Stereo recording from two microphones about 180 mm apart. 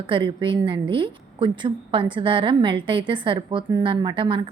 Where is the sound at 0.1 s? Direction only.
25° right (ahead or behind).